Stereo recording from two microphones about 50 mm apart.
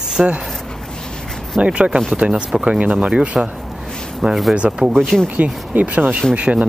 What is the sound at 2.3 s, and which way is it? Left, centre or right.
Speech, centre.